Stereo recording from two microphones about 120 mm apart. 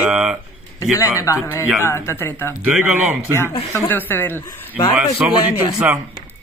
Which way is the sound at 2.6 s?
15° right (ahead or behind).